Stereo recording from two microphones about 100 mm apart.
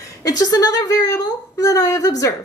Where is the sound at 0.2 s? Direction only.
40° left (ahead or behind).